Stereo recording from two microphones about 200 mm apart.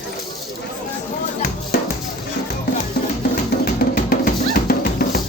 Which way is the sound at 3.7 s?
45° left (ahead or behind).